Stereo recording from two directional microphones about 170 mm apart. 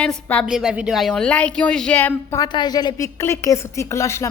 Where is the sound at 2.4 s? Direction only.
25° left (ahead or behind).